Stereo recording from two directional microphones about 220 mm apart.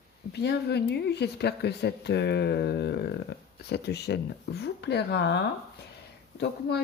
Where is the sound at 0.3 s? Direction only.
50° left (ahead or behind).